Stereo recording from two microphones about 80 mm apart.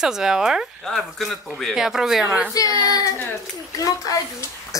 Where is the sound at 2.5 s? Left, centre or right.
Left.